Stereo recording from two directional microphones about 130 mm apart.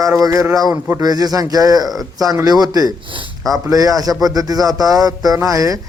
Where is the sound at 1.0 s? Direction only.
30° right (ahead or behind).